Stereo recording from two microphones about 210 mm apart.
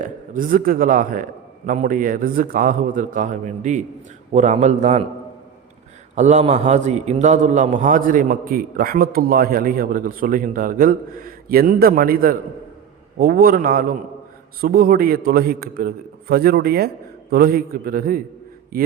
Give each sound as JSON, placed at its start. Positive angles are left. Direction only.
{"t": 0.0, "sound": "a man's voice", "side_deg": -40}
{"t": 6.1, "sound": "a man's voice", "side_deg": -35}